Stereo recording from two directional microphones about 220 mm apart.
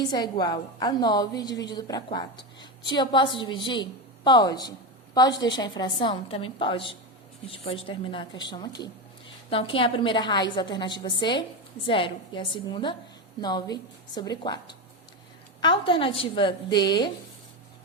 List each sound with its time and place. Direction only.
0.1 s a woman's voice: 20° left (ahead or behind)